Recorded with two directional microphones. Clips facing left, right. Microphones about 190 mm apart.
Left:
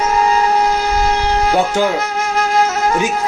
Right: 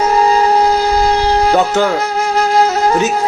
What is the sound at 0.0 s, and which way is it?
Wind instrument, 35° right (ahead or behind).